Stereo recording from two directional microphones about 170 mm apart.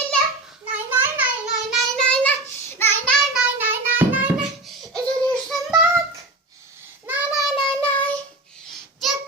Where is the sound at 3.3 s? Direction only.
10° right (ahead or behind).